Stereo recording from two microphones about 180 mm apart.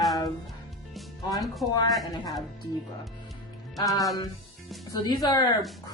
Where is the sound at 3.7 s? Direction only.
20° left (ahead or behind).